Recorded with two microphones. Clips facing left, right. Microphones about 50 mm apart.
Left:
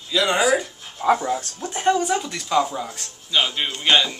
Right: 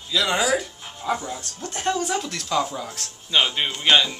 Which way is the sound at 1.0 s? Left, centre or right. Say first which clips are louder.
Left 7 dB; left.